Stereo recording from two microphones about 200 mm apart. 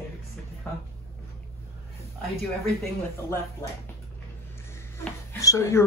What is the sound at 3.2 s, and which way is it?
Speech, 15° left (ahead or behind).